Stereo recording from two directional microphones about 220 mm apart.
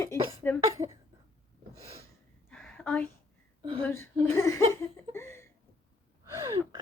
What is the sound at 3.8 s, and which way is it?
Laughter, 10° left (ahead or behind).